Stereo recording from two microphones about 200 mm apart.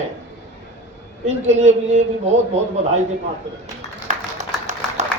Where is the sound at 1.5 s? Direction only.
35° right (ahead or behind).